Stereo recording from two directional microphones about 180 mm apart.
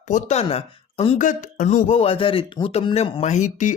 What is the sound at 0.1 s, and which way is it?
Speech, 35° left (ahead or behind).